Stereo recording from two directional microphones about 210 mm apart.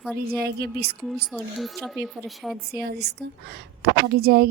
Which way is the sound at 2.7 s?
50° right (ahead or behind).